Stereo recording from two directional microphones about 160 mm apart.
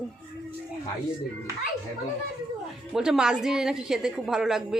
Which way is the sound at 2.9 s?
5° right (ahead or behind).